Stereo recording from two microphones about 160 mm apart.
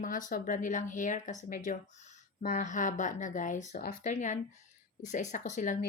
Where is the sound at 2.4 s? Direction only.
55° left (ahead or behind).